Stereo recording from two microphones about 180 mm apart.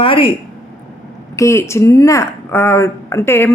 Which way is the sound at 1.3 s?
15° left (ahead or behind).